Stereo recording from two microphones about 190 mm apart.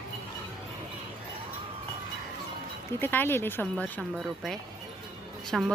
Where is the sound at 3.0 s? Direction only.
10° left (ahead or behind).